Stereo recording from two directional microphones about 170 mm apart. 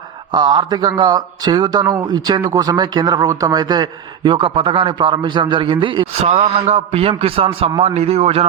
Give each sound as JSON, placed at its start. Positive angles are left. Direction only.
{"t": 0.3, "sound": "a man's voice", "side_deg": -25}